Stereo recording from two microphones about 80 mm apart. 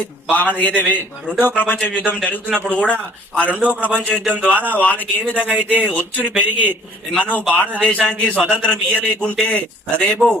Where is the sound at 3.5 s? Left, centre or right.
Centre.